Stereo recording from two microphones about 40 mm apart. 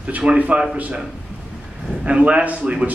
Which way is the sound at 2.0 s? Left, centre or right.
Right.